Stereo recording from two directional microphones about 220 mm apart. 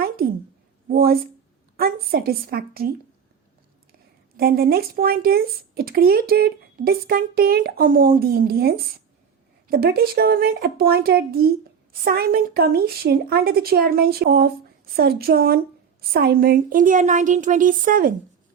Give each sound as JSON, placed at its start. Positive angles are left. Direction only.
{"t": 0.9, "sound": "speech", "side_deg": -45}
{"t": 4.4, "sound": "a woman's voice", "side_deg": -45}